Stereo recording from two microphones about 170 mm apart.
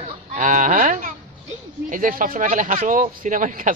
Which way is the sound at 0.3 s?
45° right (ahead or behind).